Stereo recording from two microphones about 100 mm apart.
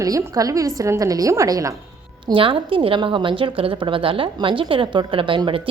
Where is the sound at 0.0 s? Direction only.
35° right (ahead or behind).